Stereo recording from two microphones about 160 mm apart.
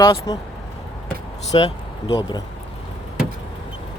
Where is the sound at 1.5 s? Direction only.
35° left (ahead or behind).